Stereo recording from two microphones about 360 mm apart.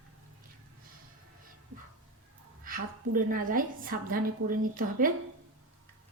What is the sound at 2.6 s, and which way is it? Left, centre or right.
A woman's voice, right.